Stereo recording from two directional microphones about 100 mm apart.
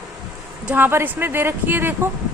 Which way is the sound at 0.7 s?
20° right (ahead or behind).